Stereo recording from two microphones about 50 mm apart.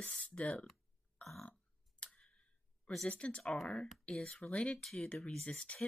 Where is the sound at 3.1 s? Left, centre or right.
Left.